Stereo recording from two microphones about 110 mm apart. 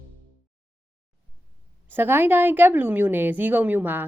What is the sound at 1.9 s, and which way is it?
A woman's voice, 20° right (ahead or behind).